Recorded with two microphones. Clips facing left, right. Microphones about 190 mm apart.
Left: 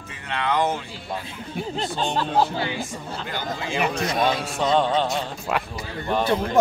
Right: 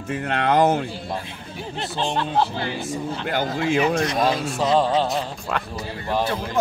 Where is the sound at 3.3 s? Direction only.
55° right (ahead or behind).